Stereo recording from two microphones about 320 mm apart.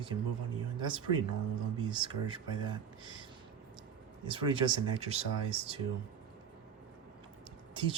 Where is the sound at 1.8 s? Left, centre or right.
Centre.